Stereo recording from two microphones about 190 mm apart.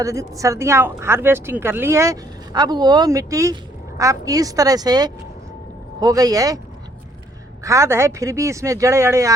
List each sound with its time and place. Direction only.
0.0 s speech: 15° right (ahead or behind)
7.6 s speech: 15° right (ahead or behind)